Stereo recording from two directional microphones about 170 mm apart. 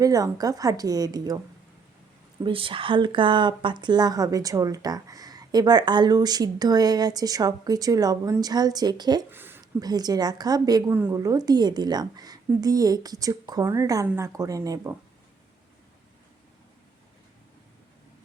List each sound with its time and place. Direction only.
0.0 s speech: 20° right (ahead or behind)
2.4 s speech: 30° right (ahead or behind)
9.3 s a sound: 10° right (ahead or behind)
9.8 s speech: 25° right (ahead or behind)